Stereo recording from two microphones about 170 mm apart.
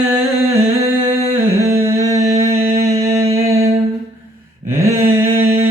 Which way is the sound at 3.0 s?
20° right (ahead or behind).